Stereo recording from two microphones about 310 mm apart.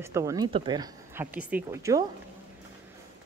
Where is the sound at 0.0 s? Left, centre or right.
Centre.